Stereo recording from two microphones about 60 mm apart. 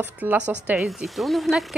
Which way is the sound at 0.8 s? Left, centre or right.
Centre.